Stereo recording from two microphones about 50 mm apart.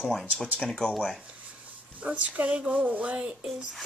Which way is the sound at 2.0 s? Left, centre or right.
Right.